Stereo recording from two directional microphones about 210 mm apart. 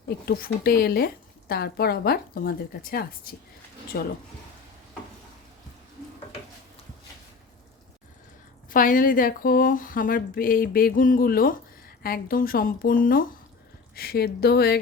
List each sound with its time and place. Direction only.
0.3 s speech: 45° left (ahead or behind)
8.7 s speech: 40° left (ahead or behind)